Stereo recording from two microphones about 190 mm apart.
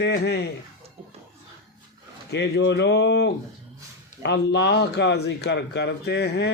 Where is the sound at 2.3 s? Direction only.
65° left (ahead or behind).